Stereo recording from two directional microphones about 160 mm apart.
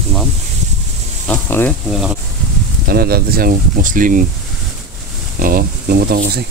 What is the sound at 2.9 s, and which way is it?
Speech, 70° right (ahead or behind).